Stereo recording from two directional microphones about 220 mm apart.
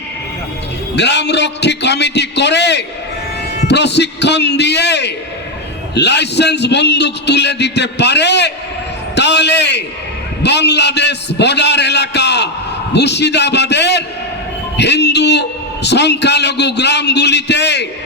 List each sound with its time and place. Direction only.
0.9 s a man's voice: 50° left (ahead or behind)